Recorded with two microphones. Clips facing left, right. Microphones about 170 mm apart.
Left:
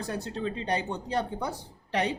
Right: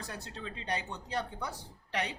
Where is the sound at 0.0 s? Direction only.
25° left (ahead or behind).